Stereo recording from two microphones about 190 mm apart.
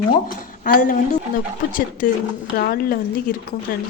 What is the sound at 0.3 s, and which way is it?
Speech, 45° left (ahead or behind).